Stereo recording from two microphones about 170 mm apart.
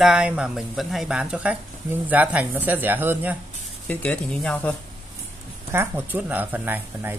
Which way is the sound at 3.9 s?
10° left (ahead or behind).